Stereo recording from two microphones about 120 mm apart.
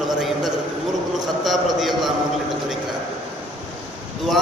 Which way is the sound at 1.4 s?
Centre (ahead or behind).